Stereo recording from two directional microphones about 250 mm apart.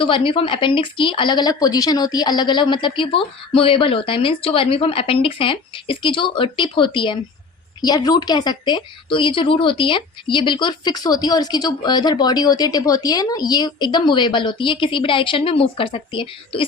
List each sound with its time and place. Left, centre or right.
0.0 s a woman's voice: left